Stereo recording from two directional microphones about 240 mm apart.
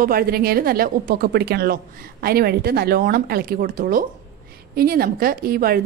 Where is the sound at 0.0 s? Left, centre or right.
Right.